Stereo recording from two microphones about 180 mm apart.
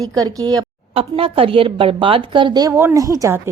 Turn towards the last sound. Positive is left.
turn(degrees=-15)  # may be behind; listen again after turning